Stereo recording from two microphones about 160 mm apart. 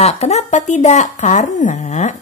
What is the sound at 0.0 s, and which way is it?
Speech, 40° left (ahead or behind).